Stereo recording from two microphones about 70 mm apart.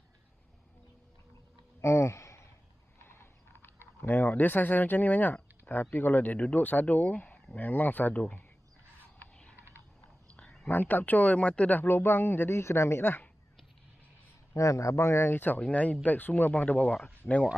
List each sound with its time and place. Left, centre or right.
1.8 s a sound: left
3.0 s speech: left
9.2 s a sound: centre
10.7 s speech: left
13.0 s speech: left
14.5 s speech: left